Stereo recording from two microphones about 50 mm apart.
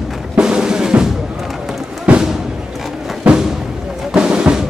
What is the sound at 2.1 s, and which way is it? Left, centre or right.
Music, right.